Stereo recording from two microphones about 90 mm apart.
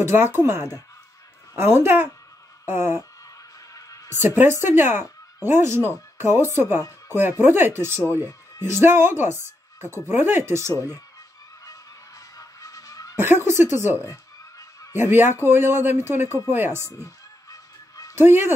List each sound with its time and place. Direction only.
0.0 s speech: 25° right (ahead or behind)
3.7 s music: 35° left (ahead or behind)
4.4 s speech: 25° right (ahead or behind)
10.7 s speech: 35° left (ahead or behind)
12.4 s music: 40° left (ahead or behind)
13.1 s speech: 25° right (ahead or behind)
14.0 s a sound: 35° left (ahead or behind)
15.0 s speech: 25° right (ahead or behind)
17.0 s honk: 40° left (ahead or behind)
18.1 s speech: 25° right (ahead or behind)